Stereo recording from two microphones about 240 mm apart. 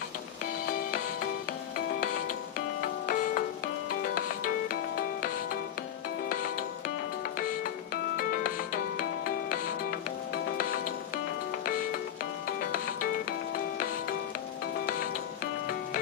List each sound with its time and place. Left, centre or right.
3.1 s music: left
6.2 s music: left
10.3 s music: left
12.5 s music: left